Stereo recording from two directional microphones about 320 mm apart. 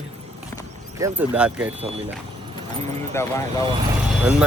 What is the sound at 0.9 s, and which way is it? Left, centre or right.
Speech, centre.